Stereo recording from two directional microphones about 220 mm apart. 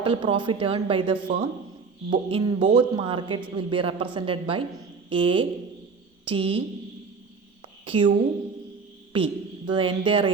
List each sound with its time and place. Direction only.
0.0 s a woman's voice: 25° right (ahead or behind)
7.9 s a woman's voice: 20° right (ahead or behind)
9.1 s a woman's voice: 25° right (ahead or behind)